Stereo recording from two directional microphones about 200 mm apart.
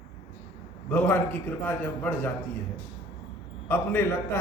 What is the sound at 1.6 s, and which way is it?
Speech, 10° left (ahead or behind).